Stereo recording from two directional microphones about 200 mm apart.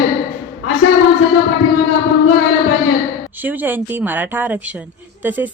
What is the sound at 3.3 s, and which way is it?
A woman's voice, 10° right (ahead or behind).